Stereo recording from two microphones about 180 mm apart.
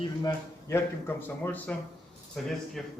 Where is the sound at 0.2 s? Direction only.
15° left (ahead or behind).